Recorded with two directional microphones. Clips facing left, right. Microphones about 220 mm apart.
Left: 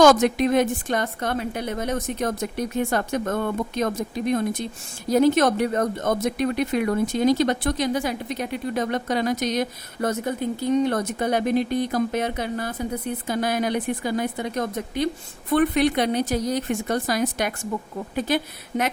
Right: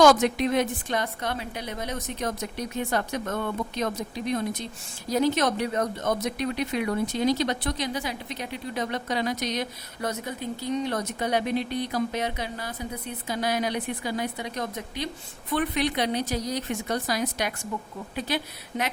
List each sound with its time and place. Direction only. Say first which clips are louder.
0.0 s a woman's voice: left 3 dB; 45° left (ahead or behind)